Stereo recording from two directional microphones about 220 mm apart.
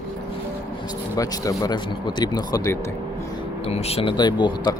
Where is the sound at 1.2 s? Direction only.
15° left (ahead or behind).